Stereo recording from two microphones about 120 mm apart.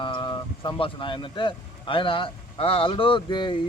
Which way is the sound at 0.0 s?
40° left (ahead or behind).